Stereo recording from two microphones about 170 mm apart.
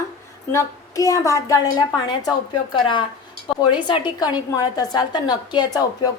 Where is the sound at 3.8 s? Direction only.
25° left (ahead or behind).